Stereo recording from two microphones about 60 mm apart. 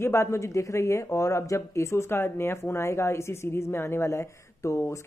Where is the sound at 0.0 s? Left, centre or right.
Left.